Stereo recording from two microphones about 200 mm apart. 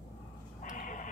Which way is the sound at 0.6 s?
40° left (ahead or behind).